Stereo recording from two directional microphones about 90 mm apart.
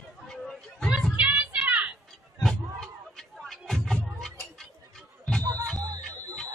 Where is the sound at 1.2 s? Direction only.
15° right (ahead or behind).